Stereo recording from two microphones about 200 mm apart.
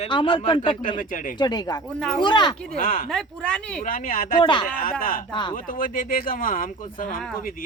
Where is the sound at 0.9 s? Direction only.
40° left (ahead or behind).